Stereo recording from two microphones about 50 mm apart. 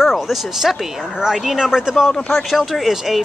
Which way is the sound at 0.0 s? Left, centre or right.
Centre.